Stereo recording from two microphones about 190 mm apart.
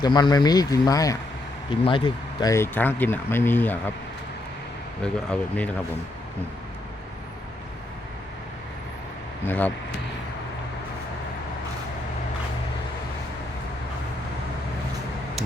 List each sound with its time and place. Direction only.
0.0 s speech: 20° left (ahead or behind)
5.0 s speech: 5° left (ahead or behind)
9.5 s speech: 10° left (ahead or behind)